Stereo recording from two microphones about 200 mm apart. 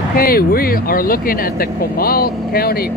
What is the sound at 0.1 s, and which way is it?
Speech, 45° left (ahead or behind).